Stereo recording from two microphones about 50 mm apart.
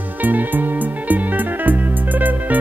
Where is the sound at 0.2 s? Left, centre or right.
Right.